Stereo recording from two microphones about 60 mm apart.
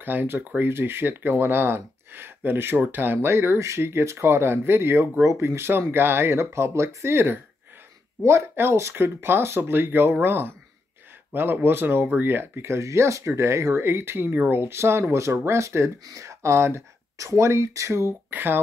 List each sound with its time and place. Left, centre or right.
0.0 s speech: right
3.3 s speech: right
5.2 s speech: right
13.8 s speech: right
16.0 s speech: right
18.3 s speech: right